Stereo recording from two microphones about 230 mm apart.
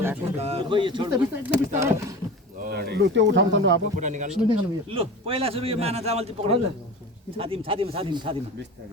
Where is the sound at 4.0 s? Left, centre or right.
Right.